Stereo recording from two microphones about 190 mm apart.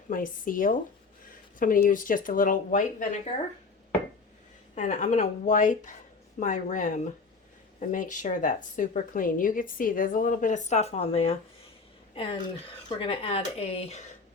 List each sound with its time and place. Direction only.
0.1 s a woman's voice: 45° left (ahead or behind)
4.7 s a woman's voice: 40° left (ahead or behind)